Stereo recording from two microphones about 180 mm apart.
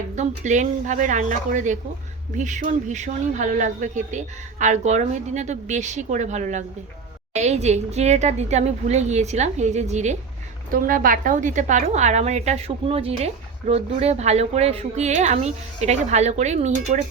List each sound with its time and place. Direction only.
0.2 s a woman's voice: 45° right (ahead or behind)
10.7 s a woman's voice: 50° right (ahead or behind)